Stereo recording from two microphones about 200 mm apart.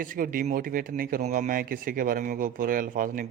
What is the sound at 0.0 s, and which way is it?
Speech, 45° right (ahead or behind).